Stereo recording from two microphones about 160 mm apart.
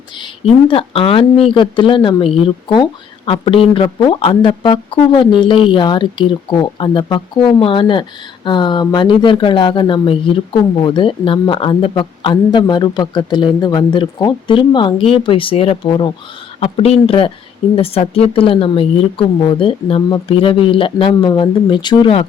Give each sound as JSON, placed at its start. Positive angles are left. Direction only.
{"t": 0.7, "sound": "a woman's voice", "side_deg": 35}